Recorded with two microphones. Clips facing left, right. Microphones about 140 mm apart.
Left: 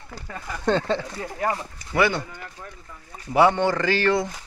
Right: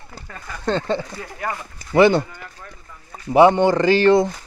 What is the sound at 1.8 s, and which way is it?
Speech, 25° right (ahead or behind).